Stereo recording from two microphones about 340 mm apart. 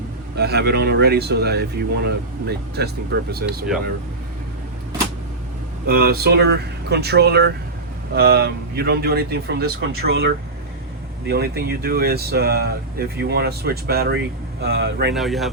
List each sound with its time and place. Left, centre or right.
0.3 s speech: right
5.9 s speech: right
15.1 s speech: centre